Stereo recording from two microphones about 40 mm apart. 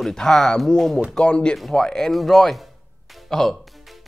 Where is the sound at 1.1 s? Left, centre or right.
Left.